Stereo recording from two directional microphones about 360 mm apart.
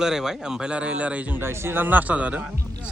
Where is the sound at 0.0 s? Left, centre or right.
Centre.